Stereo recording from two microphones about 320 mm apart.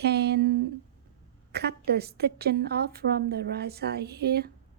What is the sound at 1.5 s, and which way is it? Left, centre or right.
A woman's voice, right.